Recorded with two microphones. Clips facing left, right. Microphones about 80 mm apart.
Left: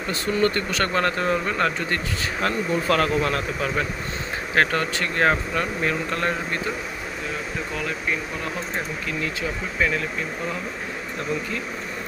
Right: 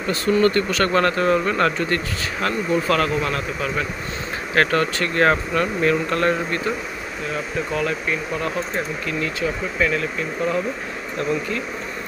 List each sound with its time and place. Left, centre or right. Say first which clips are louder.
0.1 s speech: right 5 dB; left
2.4 s speech: right 2 dB; left
4.6 s speech: right 3 dB; centre
7.7 s speech: right 4 dB; centre
9.8 s speech: right 2 dB; centre